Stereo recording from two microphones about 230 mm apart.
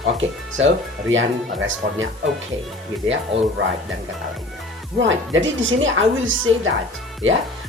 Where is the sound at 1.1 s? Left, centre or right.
Right.